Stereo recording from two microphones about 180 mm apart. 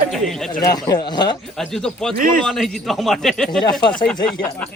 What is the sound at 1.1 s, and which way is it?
Speech, 25° left (ahead or behind).